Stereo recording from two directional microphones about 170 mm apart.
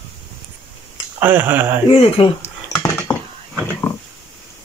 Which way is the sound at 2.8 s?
10° left (ahead or behind).